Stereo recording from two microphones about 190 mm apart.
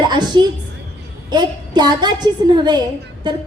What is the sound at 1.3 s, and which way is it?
A woman's voice, 20° right (ahead or behind).